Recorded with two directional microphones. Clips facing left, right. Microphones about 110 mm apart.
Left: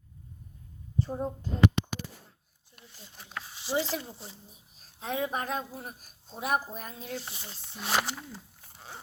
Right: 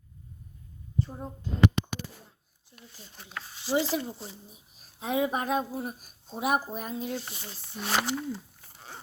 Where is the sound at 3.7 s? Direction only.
10° right (ahead or behind).